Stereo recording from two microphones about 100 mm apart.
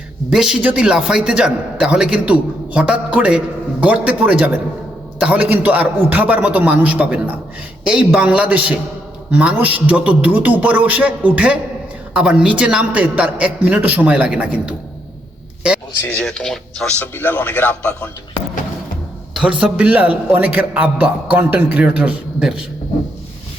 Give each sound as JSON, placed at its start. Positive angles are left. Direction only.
{"t": 0.3, "sound": "a man's voice", "side_deg": -5}
{"t": 16.1, "sound": "speech", "side_deg": 5}
{"t": 17.0, "sound": "speech", "side_deg": 20}
{"t": 19.3, "sound": "a man's voice", "side_deg": -10}